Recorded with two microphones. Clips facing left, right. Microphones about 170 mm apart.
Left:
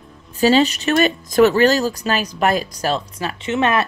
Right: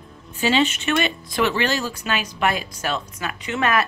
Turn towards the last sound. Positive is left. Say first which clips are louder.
# left 3 dB
turn(degrees=25)  # may be behind; listen again after turning